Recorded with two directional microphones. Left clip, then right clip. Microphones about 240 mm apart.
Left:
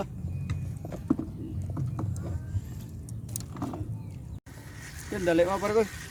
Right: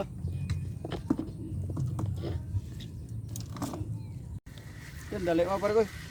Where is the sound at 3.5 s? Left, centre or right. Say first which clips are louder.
Left 1 dB; right.